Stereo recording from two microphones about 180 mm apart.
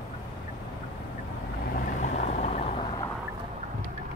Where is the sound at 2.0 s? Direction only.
45° left (ahead or behind).